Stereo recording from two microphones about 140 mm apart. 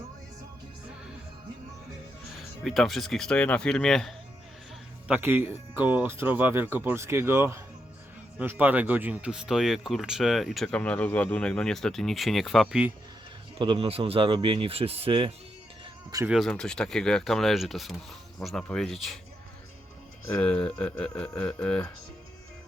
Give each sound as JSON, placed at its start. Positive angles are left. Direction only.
{"t": 2.6, "sound": "speech", "side_deg": 0}
{"t": 5.0, "sound": "speech", "side_deg": -10}
{"t": 13.6, "sound": "speech", "side_deg": -40}
{"t": 16.2, "sound": "speech", "side_deg": 0}
{"t": 20.2, "sound": "speech", "side_deg": 10}